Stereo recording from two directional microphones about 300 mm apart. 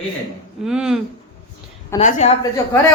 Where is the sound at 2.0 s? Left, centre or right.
Left.